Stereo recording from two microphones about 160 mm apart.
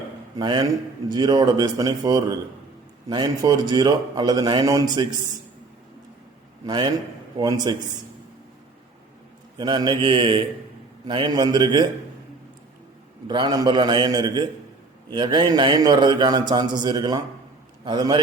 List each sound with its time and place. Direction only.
0.3 s a man's voice: 25° right (ahead or behind)
6.7 s a man's voice: 25° right (ahead or behind)
9.6 s a man's voice: 25° right (ahead or behind)
13.2 s a man's voice: 25° right (ahead or behind)